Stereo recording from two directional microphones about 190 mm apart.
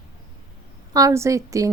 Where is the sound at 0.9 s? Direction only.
15° right (ahead or behind).